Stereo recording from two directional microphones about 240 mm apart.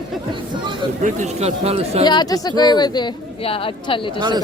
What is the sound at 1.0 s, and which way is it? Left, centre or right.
Speech, right.